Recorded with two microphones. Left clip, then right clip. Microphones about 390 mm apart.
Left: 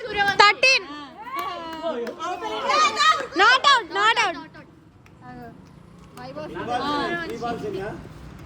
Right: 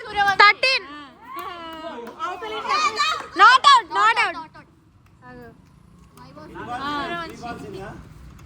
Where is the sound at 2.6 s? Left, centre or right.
Centre.